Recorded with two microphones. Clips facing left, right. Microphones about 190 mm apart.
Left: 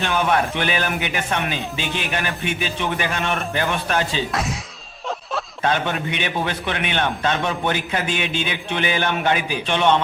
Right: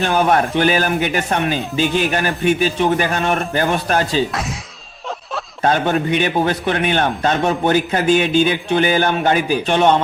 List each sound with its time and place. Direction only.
0.0 s a man's voice: 40° right (ahead or behind)
4.3 s speech: centre (ahead or behind)
5.6 s a man's voice: 40° right (ahead or behind)